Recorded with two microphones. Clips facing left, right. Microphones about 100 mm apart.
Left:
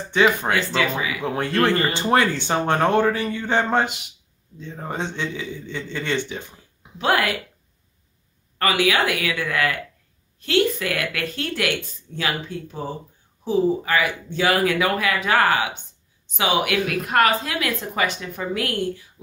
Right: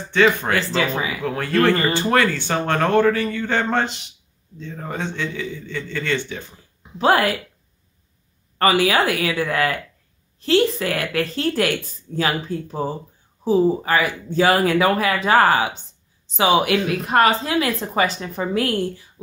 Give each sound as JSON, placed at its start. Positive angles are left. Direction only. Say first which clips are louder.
{"t": 0.1, "sound": "speech", "louder": "right 1 dB", "side_deg": 15}
{"t": 0.6, "sound": "a woman's voice", "louder": "right 1 dB", "side_deg": -35}
{"t": 1.2, "sound": "speech", "louder": "right 3 dB", "side_deg": 20}
{"t": 7.0, "sound": "a woman's voice", "louder": "right 4 dB", "side_deg": -35}
{"t": 8.5, "sound": "a woman's voice", "louder": "right 3 dB", "side_deg": -35}